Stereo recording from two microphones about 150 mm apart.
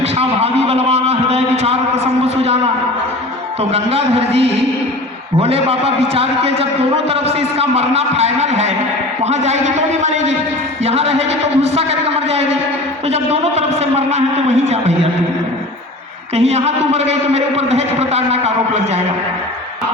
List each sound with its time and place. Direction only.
0.0 s a sound: 45° right (ahead or behind)
3.6 s a man's voice: 40° right (ahead or behind)
16.3 s a man's voice: 45° right (ahead or behind)